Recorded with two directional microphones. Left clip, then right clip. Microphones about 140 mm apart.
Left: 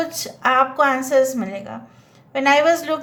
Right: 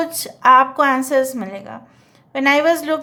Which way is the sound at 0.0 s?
30° right (ahead or behind).